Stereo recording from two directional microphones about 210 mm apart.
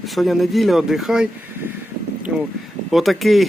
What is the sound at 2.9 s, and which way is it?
Speech, centre (ahead or behind).